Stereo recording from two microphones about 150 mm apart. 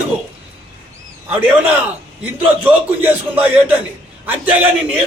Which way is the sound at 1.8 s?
10° right (ahead or behind).